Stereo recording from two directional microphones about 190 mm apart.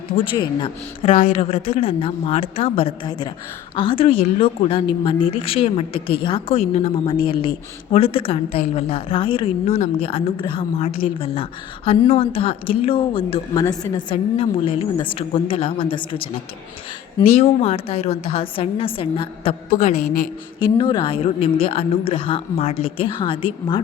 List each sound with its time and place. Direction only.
0.3 s a woman's voice: 25° left (ahead or behind)
1.1 s a woman's voice: 45° left (ahead or behind)
1.4 s a woman's voice: 30° left (ahead or behind)
17.4 s a woman's voice: 30° left (ahead or behind)
20.6 s a woman's voice: 25° left (ahead or behind)